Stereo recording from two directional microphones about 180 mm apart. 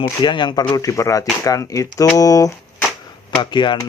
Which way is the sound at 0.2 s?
25° left (ahead or behind).